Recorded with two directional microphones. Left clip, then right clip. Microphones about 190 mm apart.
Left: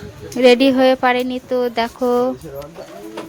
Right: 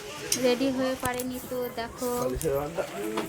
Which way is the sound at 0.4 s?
50° left (ahead or behind).